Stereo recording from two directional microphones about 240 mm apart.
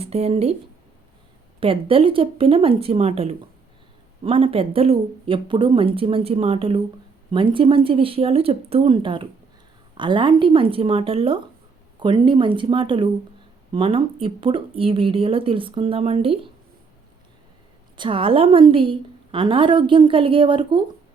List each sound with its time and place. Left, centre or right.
0.0 s a woman's voice: right
1.6 s a woman's voice: right
17.9 s a woman's voice: right